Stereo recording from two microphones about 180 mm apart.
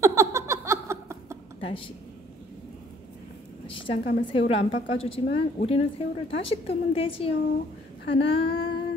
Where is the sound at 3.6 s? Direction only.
30° left (ahead or behind).